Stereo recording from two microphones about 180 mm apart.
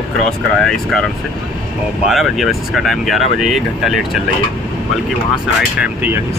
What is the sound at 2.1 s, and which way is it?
Speech, centre (ahead or behind).